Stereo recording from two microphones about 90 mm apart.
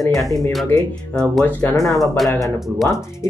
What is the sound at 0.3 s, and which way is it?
Speech, centre (ahead or behind).